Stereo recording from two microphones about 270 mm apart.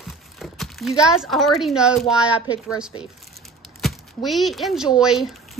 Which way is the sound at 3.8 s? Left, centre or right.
Centre.